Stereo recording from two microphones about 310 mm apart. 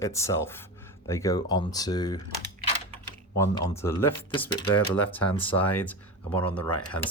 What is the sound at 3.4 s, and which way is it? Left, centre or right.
Speech, centre.